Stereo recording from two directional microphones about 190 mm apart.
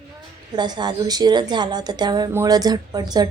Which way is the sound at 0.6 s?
20° right (ahead or behind).